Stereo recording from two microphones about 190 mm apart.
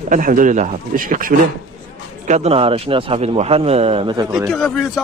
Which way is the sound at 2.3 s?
35° right (ahead or behind).